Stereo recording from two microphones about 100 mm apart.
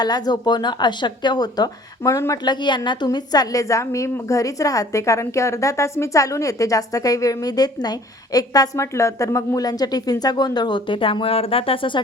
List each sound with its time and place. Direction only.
0.0 s speech: 45° left (ahead or behind)
2.4 s a woman's voice: 45° left (ahead or behind)